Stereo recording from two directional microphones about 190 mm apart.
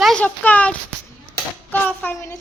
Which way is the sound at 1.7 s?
10° left (ahead or behind).